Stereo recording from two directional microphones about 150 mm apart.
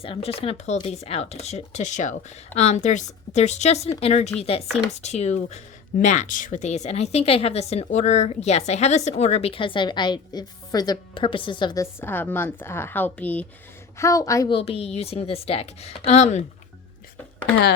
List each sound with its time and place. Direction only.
0.0 s a woman's voice: 40° left (ahead or behind); by 13.4 s 10° left (ahead or behind)
14.0 s a woman's voice: 20° left (ahead or behind)
14.5 s speech: 40° left (ahead or behind)